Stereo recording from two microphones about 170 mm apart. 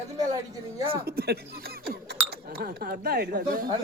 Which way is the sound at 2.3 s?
60° right (ahead or behind).